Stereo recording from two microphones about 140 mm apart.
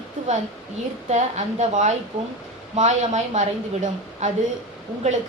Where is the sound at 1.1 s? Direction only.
55° right (ahead or behind).